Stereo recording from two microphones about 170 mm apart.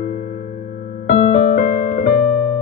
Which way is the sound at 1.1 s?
50° left (ahead or behind).